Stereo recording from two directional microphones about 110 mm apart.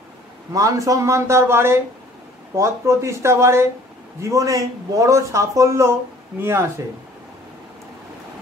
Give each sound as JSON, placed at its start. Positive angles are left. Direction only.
{"t": 0.5, "sound": "speech", "side_deg": -30}